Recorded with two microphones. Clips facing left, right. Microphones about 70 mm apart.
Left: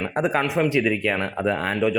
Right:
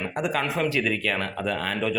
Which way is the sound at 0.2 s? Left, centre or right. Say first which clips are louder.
Left 5 dB; left.